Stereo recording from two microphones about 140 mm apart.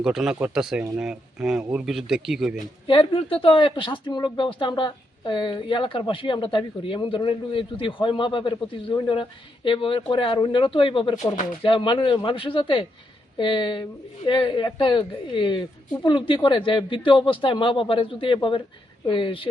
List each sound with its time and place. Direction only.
0.0 s speech: 5° right (ahead or behind)
2.8 s speech: 40° left (ahead or behind)